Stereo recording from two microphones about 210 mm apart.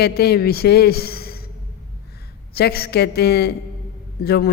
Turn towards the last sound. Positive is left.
turn(degrees=50)  # may be behind; listen again after turning